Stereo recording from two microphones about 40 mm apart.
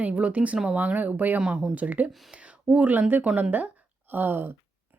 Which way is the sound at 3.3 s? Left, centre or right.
Right.